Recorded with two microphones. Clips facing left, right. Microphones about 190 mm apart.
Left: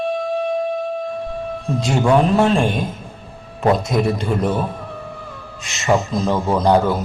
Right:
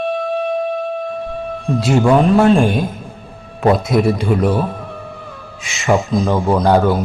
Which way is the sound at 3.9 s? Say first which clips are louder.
Right 4 dB; 5° right (ahead or behind).